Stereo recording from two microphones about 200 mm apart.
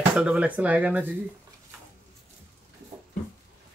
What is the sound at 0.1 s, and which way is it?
Speech, 5° right (ahead or behind).